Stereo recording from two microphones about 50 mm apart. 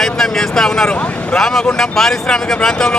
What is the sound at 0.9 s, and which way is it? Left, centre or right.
Speech, left.